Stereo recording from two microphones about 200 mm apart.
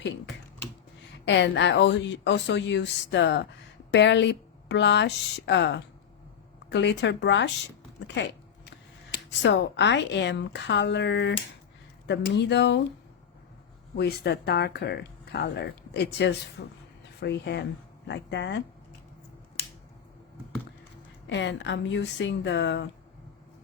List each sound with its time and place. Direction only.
1.2 s speech: 60° left (ahead or behind)
8.0 s a sound: 60° left (ahead or behind)
9.4 s speech: 60° left (ahead or behind)
13.9 s speech: 55° left (ahead or behind)
21.2 s speech: 65° left (ahead or behind)